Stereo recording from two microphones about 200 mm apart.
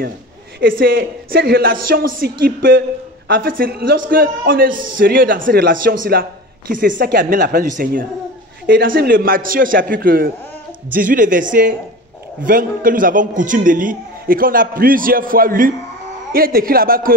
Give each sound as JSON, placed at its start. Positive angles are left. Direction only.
{"t": 0.6, "sound": "a man's voice", "side_deg": -45}